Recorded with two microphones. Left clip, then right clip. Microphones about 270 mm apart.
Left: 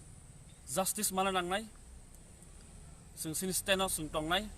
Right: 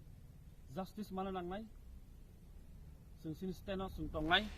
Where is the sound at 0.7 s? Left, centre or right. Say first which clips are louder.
Left 11 dB; centre.